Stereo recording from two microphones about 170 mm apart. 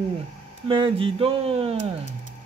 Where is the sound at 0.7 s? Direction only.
30° right (ahead or behind).